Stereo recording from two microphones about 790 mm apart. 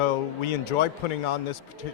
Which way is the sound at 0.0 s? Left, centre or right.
Left.